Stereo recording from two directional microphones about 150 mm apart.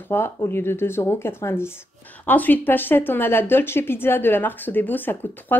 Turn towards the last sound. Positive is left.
turn(degrees=10)  # may be behind; listen again after turning